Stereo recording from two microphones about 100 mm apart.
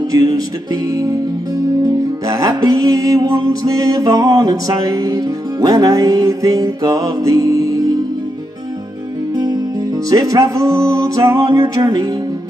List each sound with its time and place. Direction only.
0.1 s music: 40° right (ahead or behind)
2.2 s music: 35° right (ahead or behind)
9.3 s music: 40° right (ahead or behind)